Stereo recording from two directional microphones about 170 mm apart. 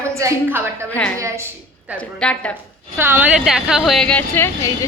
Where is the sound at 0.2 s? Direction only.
20° right (ahead or behind).